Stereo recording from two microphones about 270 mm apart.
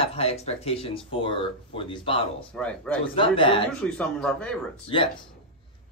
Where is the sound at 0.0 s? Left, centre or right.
Left.